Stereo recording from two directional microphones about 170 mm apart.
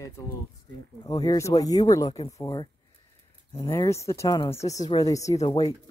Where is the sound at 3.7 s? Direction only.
15° left (ahead or behind).